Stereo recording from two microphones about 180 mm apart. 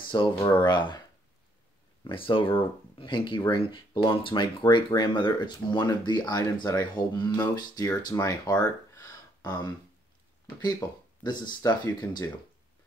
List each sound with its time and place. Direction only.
0.1 s speech: 25° left (ahead or behind)
2.0 s speech: 30° left (ahead or behind)